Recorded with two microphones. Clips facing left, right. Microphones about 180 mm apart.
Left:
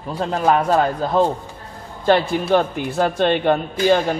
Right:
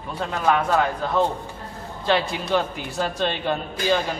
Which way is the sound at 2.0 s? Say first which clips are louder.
Left 6 dB; 50° left (ahead or behind).